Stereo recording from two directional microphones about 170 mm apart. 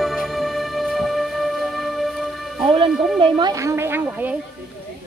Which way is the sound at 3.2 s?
25° right (ahead or behind).